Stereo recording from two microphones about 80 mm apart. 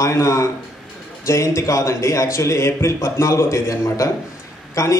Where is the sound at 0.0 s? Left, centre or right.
Left.